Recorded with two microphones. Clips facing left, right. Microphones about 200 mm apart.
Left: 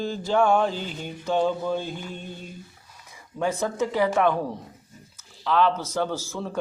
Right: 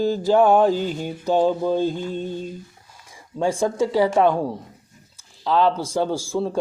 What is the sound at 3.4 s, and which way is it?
Speech, 30° right (ahead or behind).